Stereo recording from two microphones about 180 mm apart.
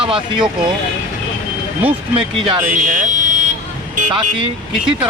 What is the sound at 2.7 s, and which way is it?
Vehicle, 45° right (ahead or behind).